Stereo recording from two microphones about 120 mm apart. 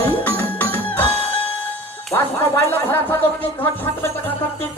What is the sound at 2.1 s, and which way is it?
Speech, 20° left (ahead or behind).